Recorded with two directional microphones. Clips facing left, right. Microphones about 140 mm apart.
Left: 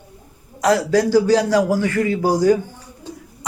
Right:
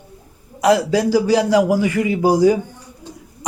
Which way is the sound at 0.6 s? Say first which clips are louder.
Right 1 dB; 10° right (ahead or behind).